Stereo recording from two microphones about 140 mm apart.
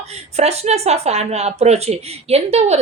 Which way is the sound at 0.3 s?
50° right (ahead or behind).